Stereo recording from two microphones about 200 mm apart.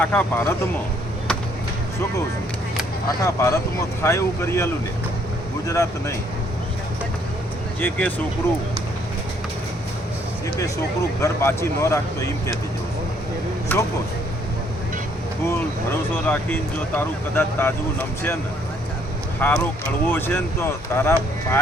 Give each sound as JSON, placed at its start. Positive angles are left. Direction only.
{"t": 0.0, "sound": "speech", "side_deg": 10}
{"t": 3.2, "sound": "speech", "side_deg": 15}
{"t": 7.8, "sound": "speech", "side_deg": 10}
{"t": 11.2, "sound": "speech", "side_deg": 15}
{"t": 13.7, "sound": "speech", "side_deg": 10}
{"t": 16.2, "sound": "speech", "side_deg": 10}
{"t": 19.4, "sound": "speech", "side_deg": 10}